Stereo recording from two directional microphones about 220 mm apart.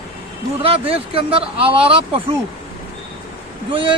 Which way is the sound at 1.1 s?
25° right (ahead or behind).